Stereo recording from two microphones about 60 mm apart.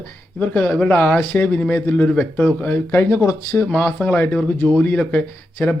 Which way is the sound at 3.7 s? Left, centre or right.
Left.